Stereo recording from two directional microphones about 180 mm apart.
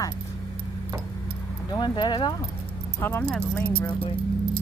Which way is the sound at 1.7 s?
25° left (ahead or behind).